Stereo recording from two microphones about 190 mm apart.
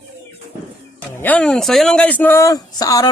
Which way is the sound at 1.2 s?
10° left (ahead or behind).